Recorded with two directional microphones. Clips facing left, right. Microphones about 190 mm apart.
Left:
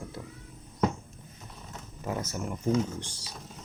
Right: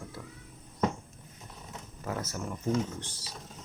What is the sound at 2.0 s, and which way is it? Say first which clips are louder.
Speech: left 2 dB; 15° left (ahead or behind).